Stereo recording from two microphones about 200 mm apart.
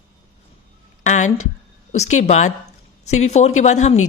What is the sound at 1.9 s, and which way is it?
A woman's voice, 35° left (ahead or behind).